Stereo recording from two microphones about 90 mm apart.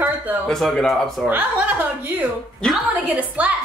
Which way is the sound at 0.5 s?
5° left (ahead or behind).